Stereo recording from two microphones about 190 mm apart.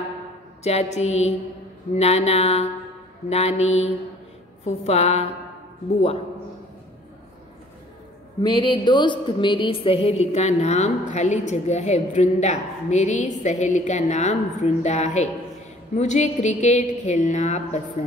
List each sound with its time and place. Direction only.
0.7 s a woman's voice: 35° left (ahead or behind)
8.4 s a woman's voice: 25° left (ahead or behind)